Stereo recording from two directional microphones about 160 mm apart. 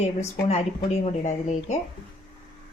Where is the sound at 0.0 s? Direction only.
40° left (ahead or behind).